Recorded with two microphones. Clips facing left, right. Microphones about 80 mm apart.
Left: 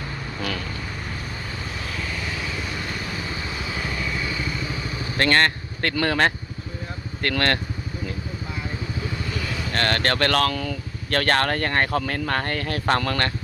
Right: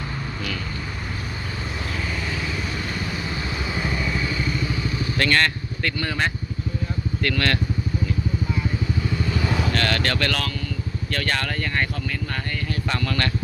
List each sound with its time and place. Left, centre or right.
3.8 s motorcycle: centre
5.1 s speech: left
5.8 s speech: left
7.2 s speech: left
9.7 s speech: left
10.5 s speech: left